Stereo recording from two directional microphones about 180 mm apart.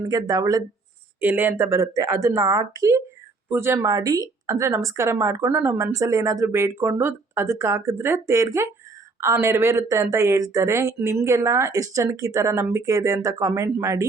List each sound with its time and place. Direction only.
0.0 s speech: 20° right (ahead or behind)